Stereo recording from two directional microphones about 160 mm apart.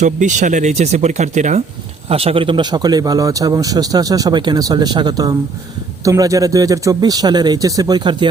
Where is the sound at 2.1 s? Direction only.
40° right (ahead or behind).